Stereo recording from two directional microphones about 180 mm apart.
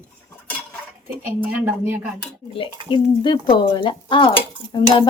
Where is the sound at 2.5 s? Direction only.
30° left (ahead or behind).